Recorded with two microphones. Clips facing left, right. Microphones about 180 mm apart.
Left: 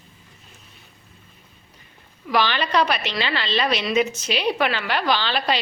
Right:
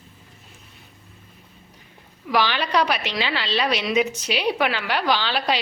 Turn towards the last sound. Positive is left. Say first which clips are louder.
# even
turn(degrees=-10)  # may be behind; listen again after turning